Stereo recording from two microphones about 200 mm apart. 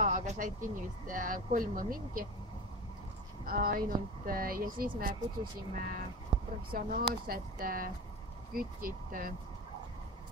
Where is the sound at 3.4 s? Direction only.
45° right (ahead or behind).